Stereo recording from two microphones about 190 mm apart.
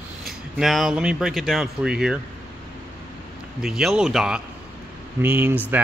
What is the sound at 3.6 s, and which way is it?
Speech, 5° right (ahead or behind).